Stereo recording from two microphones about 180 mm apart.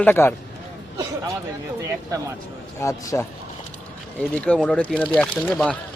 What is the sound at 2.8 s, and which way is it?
Speech, 15° left (ahead or behind).